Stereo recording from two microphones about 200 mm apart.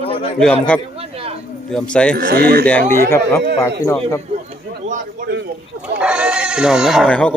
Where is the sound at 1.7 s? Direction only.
5° left (ahead or behind).